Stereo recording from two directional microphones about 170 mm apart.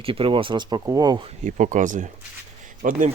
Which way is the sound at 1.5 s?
45° right (ahead or behind).